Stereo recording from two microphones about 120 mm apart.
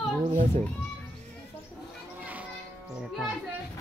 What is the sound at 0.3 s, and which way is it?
Speech, 90° right.